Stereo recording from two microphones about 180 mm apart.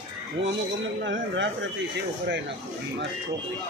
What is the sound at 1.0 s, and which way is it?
Speech, 90° right.